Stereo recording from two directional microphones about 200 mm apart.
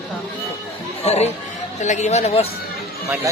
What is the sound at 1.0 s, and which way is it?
Speech, 35° left (ahead or behind).